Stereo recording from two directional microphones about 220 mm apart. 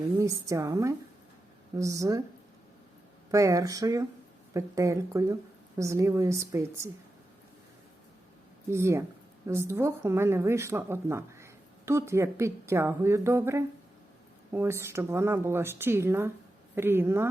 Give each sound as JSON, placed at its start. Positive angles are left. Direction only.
{"t": 0.1, "sound": "a woman's voice", "side_deg": -15}
{"t": 3.3, "sound": "a woman's voice", "side_deg": -15}
{"t": 8.7, "sound": "a woman's voice", "side_deg": -10}